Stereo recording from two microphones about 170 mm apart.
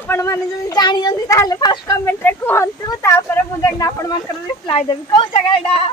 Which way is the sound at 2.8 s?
15° left (ahead or behind).